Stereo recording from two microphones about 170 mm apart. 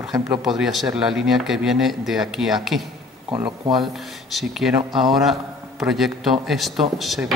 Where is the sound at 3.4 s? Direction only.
25° right (ahead or behind).